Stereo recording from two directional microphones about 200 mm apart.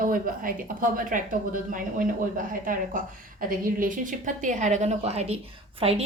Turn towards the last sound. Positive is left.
turn(degrees=-30)  # may be behind; listen again after turning